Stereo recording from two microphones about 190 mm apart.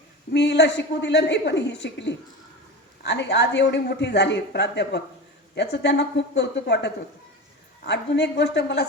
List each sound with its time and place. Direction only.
0.3 s a man's voice: 60° left (ahead or behind)